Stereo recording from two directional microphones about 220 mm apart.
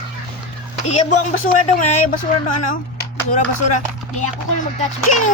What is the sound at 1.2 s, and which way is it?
Speech, 35° left (ahead or behind).